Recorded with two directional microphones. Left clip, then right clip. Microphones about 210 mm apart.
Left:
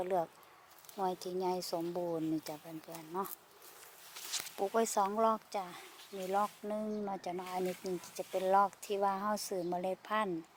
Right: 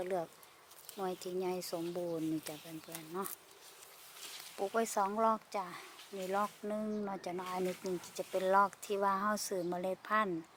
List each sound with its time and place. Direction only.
0.0 s speech: centre (ahead or behind)
4.5 s speech: 10° left (ahead or behind)